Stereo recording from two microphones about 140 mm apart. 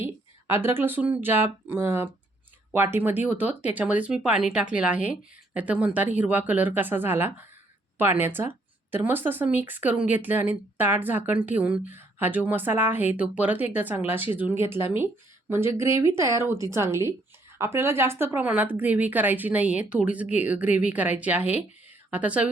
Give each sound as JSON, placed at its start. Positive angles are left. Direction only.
{"t": 0.0, "sound": "speech", "side_deg": -15}